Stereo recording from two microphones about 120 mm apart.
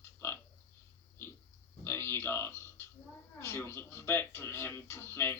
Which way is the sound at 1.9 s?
20° left (ahead or behind).